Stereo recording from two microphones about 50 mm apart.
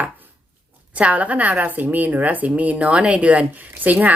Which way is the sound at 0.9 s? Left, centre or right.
Right.